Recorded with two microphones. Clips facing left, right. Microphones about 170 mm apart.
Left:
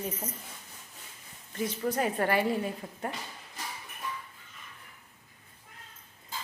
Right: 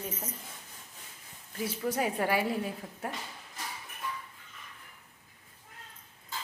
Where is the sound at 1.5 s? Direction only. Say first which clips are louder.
Left 2 dB; 5° right (ahead or behind).